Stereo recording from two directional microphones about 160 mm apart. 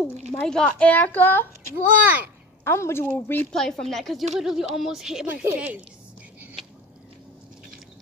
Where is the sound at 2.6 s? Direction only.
15° left (ahead or behind); by 5.8 s 10° right (ahead or behind).